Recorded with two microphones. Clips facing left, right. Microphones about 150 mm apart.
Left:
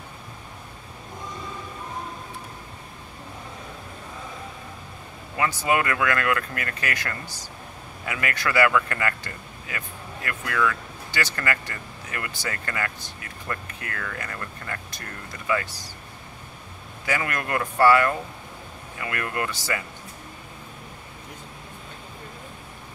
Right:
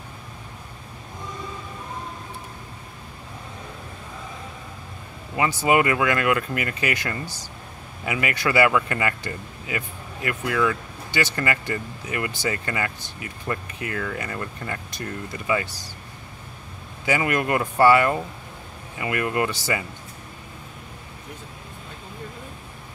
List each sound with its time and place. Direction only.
5.3 s speech: 20° right (ahead or behind)
17.0 s speech: 20° right (ahead or behind)